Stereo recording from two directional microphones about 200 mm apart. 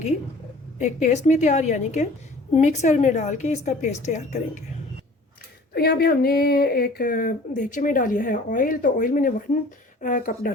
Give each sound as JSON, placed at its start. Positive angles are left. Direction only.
{"t": 0.8, "sound": "a woman's voice", "side_deg": 35}
{"t": 5.7, "sound": "a woman's voice", "side_deg": 50}